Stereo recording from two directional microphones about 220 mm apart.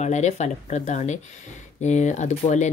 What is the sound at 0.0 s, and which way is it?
Speech, 30° left (ahead or behind).